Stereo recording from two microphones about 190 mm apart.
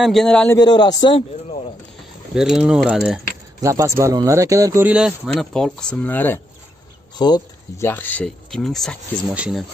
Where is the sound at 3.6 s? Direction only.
15° right (ahead or behind); by 6.4 s 10° left (ahead or behind).